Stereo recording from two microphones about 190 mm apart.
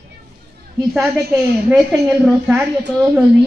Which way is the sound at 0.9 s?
5° right (ahead or behind).